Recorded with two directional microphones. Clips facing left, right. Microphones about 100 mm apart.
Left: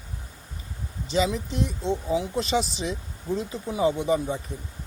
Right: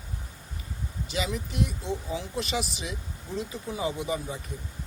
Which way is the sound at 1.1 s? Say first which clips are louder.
Left 7 dB; 25° left (ahead or behind).